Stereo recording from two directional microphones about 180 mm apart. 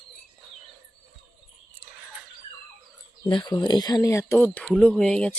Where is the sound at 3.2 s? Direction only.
25° left (ahead or behind).